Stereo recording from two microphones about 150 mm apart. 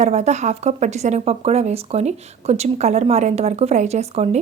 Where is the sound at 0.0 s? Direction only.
50° right (ahead or behind).